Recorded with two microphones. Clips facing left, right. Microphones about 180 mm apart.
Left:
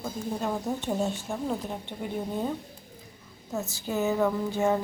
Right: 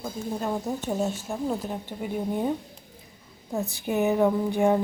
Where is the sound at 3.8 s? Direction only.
15° right (ahead or behind).